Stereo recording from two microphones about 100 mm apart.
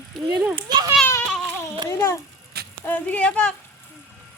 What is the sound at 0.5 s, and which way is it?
Speech, 45° right (ahead or behind).